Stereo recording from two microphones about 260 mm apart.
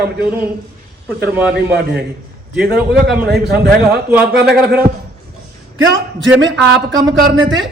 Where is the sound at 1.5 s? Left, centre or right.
Right.